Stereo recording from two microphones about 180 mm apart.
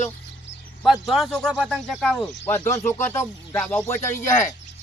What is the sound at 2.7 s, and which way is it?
Speech, 15° left (ahead or behind).